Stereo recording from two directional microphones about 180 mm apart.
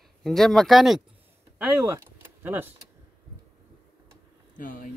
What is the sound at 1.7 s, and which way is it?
Vehicle, 20° right (ahead or behind).